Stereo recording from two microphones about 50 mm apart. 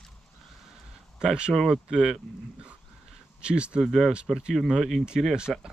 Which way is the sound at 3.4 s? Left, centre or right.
Right.